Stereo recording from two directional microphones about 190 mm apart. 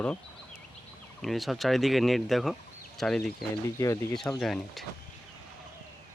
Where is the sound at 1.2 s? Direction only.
Centre (ahead or behind).